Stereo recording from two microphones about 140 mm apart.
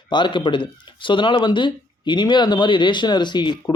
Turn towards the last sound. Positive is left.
turn(degrees=30)  # may be behind; listen again after turning